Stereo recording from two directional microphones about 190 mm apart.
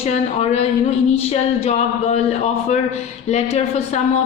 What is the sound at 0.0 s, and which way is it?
A woman's voice, 35° left (ahead or behind).